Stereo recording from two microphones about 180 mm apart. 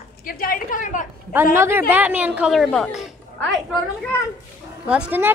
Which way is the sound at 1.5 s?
15° right (ahead or behind).